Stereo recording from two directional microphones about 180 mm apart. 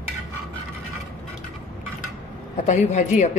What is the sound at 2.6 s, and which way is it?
Speech, 40° left (ahead or behind).